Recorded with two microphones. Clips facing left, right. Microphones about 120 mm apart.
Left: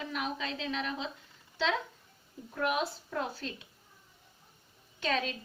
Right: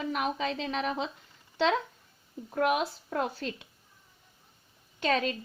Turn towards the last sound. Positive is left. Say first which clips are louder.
# right 4 dB
turn(degrees=-55)  # may be behind; listen again after turning